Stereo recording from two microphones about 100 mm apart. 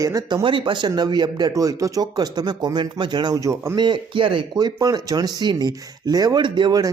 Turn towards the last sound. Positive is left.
turn(degrees=-45)  # may be behind; listen again after turning